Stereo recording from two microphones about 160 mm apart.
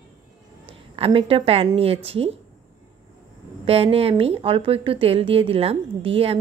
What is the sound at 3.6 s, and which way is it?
A woman's voice, 35° right (ahead or behind).